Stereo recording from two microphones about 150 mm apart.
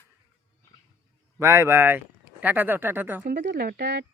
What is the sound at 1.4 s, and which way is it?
Speech, 15° right (ahead or behind).